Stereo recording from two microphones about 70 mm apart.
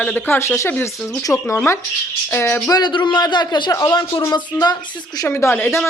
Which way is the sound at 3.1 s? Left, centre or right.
Left.